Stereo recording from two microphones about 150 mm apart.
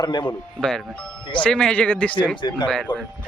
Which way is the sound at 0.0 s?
30° left (ahead or behind).